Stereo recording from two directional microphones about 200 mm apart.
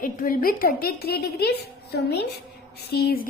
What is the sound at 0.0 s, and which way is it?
A woman's voice, 45° left (ahead or behind).